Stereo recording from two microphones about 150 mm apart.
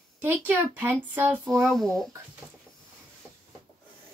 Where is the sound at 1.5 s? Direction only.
Centre (ahead or behind).